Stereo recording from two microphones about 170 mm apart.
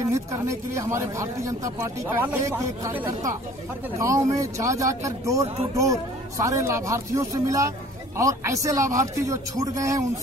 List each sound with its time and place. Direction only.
0.1 s speech: 15° right (ahead or behind)